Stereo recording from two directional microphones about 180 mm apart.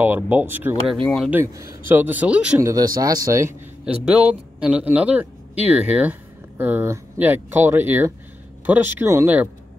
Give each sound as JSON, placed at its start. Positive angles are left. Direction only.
{"t": 0.0, "sound": "a man's voice", "side_deg": -10}
{"t": 1.0, "sound": "speech", "side_deg": 5}
{"t": 1.3, "sound": "a man's voice", "side_deg": -15}
{"t": 2.7, "sound": "speech", "side_deg": -20}
{"t": 3.8, "sound": "a man's voice", "side_deg": -5}